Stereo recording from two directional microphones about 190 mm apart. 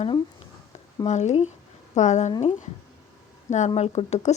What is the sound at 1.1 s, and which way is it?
Speech, 35° left (ahead or behind).